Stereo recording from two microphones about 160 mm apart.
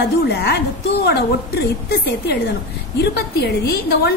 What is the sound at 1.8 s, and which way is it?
A woman's voice, 80° left.